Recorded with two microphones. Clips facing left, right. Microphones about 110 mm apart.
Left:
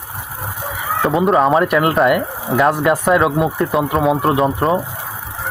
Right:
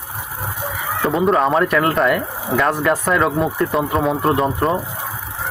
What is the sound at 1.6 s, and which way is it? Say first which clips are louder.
Speech: left 2 dB; 15° left (ahead or behind).